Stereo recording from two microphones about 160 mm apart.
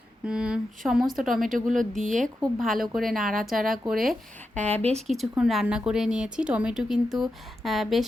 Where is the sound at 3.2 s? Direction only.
60° right (ahead or behind).